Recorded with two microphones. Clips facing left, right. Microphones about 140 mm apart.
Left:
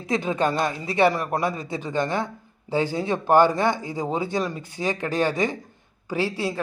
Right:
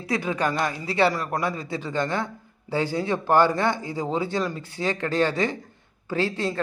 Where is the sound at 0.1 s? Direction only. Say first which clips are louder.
Left 2 dB; 25° left (ahead or behind).